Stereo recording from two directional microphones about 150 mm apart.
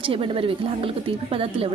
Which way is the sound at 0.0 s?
35° right (ahead or behind).